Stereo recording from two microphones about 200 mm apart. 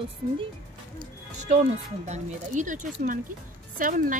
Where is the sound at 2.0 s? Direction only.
35° right (ahead or behind).